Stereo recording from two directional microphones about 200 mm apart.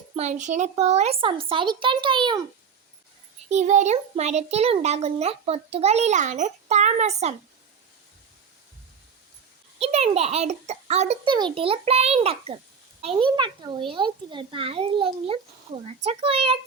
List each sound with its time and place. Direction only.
0.2 s speech: 35° right (ahead or behind)
3.5 s a child's voice: 35° right (ahead or behind)
9.7 s a child's voice: 30° right (ahead or behind)